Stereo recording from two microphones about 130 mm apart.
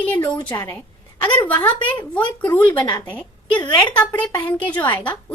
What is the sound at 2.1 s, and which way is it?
A woman's voice, 10° left (ahead or behind).